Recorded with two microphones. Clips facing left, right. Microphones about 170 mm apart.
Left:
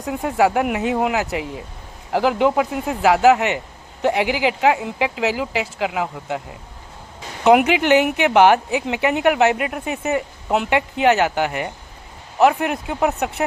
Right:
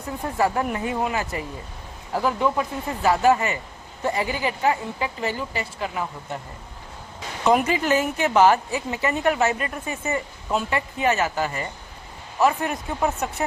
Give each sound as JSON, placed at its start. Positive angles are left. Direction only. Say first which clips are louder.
{"t": 0.0, "sound": "speech", "louder": "left 5 dB", "side_deg": 85}
{"t": 7.4, "sound": "a woman's voice", "louder": "left 6 dB", "side_deg": 70}